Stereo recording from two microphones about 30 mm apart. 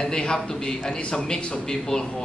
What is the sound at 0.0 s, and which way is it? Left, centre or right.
A man's voice, left.